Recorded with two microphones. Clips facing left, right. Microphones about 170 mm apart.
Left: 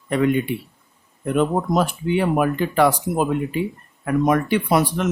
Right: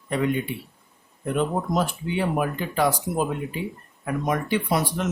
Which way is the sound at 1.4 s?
70° left (ahead or behind).